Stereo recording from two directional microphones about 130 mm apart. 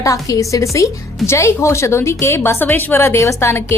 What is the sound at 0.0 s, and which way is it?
A woman's voice, 25° left (ahead or behind).